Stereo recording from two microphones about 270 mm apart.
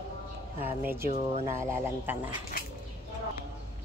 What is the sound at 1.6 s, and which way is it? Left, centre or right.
Speech, centre.